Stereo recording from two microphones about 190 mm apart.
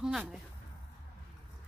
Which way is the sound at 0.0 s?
5° right (ahead or behind).